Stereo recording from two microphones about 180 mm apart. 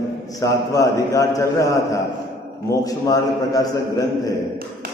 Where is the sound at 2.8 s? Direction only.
20° left (ahead or behind).